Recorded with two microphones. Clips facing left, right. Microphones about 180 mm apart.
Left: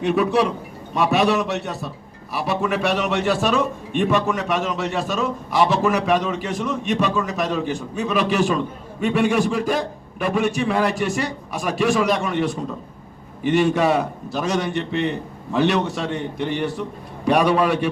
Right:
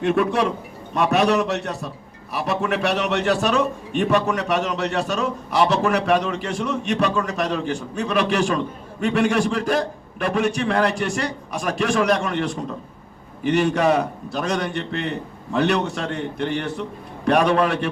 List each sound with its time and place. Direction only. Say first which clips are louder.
0.0 s a man's voice: left 1 dB; centre (ahead or behind)